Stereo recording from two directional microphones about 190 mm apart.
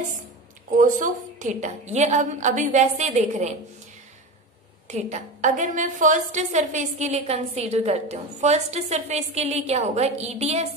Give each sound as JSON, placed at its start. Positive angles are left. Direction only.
{"t": 0.7, "sound": "a woman's voice", "side_deg": -45}
{"t": 4.8, "sound": "a woman's voice", "side_deg": -35}